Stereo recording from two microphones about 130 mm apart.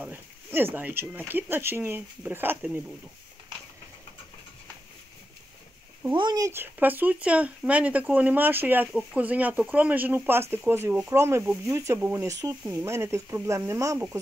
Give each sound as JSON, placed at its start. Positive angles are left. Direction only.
{"t": 0.0, "sound": "speech", "side_deg": -15}
{"t": 6.1, "sound": "speech", "side_deg": -30}
{"t": 6.5, "sound": "speech", "side_deg": -15}